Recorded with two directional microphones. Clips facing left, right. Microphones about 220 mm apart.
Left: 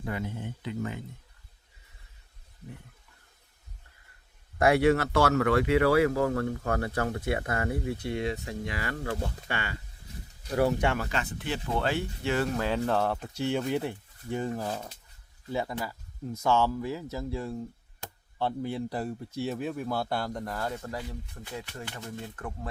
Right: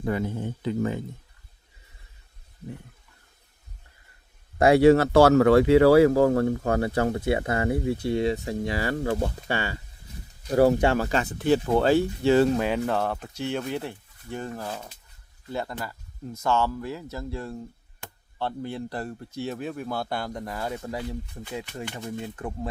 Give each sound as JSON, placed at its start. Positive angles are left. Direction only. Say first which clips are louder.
{"t": 0.1, "sound": "speech", "louder": "right 7 dB", "side_deg": -40}
{"t": 4.5, "sound": "speech", "louder": "right 6 dB", "side_deg": -30}
{"t": 12.5, "sound": "speech", "louder": "right 3 dB", "side_deg": -15}
{"t": 12.9, "sound": "speech", "louder": "right 1 dB", "side_deg": 0}
{"t": 13.7, "sound": "speech", "louder": "left 1 dB", "side_deg": 10}